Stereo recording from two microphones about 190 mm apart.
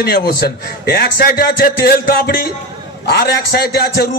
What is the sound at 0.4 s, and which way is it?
A man's voice, 55° left (ahead or behind).